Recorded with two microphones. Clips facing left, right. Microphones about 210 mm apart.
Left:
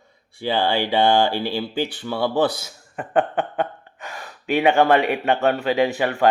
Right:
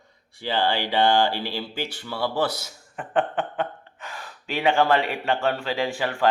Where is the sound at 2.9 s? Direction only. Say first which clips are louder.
Left 4 dB; 45° left (ahead or behind).